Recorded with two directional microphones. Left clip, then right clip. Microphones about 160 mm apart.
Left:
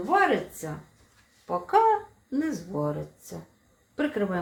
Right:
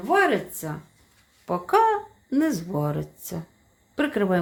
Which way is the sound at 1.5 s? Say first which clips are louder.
Right 2 dB; 80° right.